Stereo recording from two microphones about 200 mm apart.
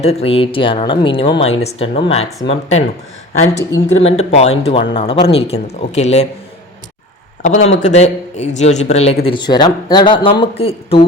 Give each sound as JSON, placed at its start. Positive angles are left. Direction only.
{"t": 0.0, "sound": "speech", "side_deg": 30}
{"t": 3.8, "sound": "speech", "side_deg": 35}
{"t": 7.4, "sound": "speech", "side_deg": 35}